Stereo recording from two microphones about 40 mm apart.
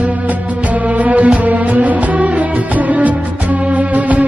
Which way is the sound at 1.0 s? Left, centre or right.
Right.